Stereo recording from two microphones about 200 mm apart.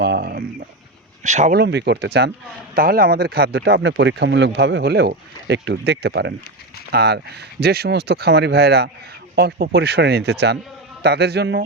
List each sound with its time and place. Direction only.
0.0 s a sound: 55° right (ahead or behind)
1.2 s speech: 35° right (ahead or behind)
1.5 s speech: 55° right (ahead or behind)